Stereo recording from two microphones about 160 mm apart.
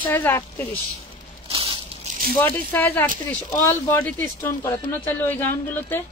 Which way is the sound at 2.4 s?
10° left (ahead or behind).